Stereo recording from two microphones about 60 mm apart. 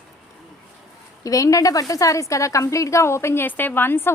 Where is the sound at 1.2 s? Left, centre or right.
Left.